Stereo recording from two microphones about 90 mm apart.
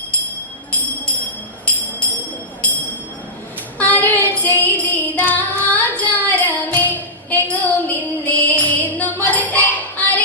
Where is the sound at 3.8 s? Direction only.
15° left (ahead or behind).